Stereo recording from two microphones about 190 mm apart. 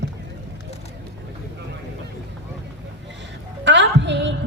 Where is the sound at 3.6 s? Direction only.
70° right (ahead or behind).